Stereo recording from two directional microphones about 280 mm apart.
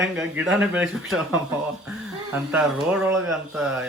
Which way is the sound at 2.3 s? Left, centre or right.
Centre.